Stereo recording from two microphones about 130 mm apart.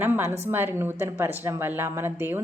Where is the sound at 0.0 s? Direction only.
20° right (ahead or behind).